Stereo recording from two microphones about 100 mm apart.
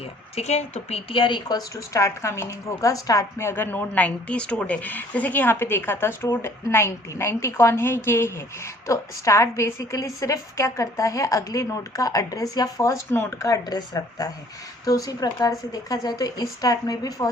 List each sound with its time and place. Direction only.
0.3 s a woman's voice: 90° left
1.2 s a woman's voice: 45° left (ahead or behind)